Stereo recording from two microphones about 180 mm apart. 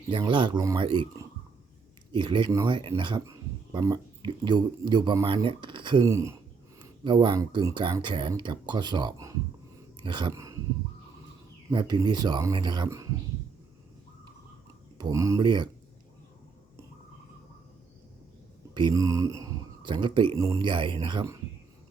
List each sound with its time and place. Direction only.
0.1 s speech: 25° right (ahead or behind)
2.1 s speech: 25° right (ahead or behind)
11.7 s speech: 25° right (ahead or behind)
14.9 s speech: 20° right (ahead or behind)
18.7 s speech: 25° right (ahead or behind)